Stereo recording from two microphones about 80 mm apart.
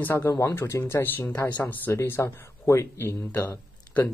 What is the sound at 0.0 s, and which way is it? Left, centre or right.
Speech, left.